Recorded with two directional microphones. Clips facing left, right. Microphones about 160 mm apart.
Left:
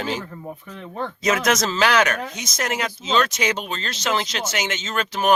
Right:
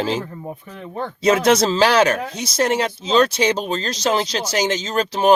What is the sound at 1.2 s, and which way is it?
Speech, 30° right (ahead or behind).